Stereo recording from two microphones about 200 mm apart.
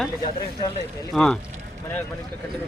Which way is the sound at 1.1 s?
5° left (ahead or behind).